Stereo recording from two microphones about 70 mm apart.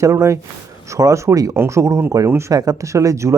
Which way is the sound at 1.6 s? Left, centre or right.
Right.